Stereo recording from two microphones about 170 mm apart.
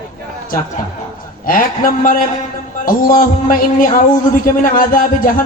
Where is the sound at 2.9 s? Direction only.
55° left (ahead or behind).